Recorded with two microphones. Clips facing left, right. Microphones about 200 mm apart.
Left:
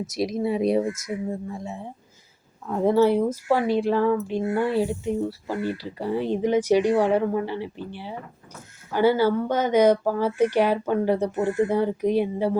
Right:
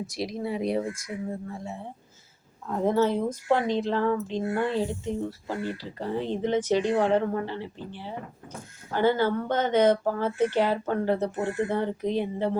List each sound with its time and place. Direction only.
0.1 s speech: 20° left (ahead or behind)
2.6 s speech: 10° left (ahead or behind)